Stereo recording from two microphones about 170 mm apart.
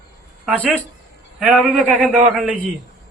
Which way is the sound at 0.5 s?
10° left (ahead or behind).